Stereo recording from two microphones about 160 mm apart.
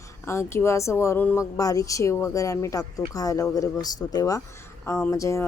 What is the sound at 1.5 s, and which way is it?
A woman's voice, 20° left (ahead or behind).